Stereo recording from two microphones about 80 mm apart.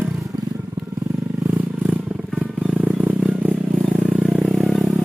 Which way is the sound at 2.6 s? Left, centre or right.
Centre.